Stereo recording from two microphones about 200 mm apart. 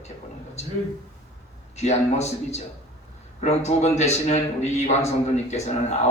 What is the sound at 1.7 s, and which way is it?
A man's voice, 35° left (ahead or behind).